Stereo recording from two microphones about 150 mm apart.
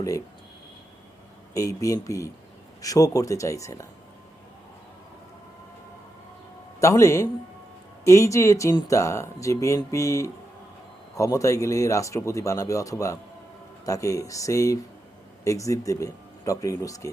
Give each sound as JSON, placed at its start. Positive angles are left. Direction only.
{"t": 1.5, "sound": "speech", "side_deg": 20}
{"t": 6.7, "sound": "speech", "side_deg": 20}